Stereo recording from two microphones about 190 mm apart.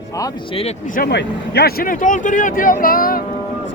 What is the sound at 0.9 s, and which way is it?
Speech, 55° left (ahead or behind).